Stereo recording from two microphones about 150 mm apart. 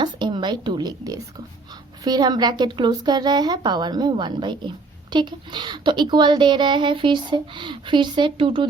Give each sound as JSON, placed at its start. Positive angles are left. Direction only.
{"t": 0.0, "sound": "a woman's voice", "side_deg": -30}